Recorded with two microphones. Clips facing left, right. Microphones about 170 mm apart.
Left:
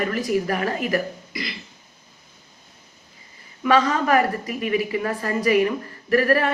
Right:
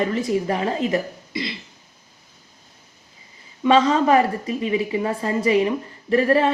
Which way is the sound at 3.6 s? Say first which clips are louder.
Right 3 dB; 25° right (ahead or behind).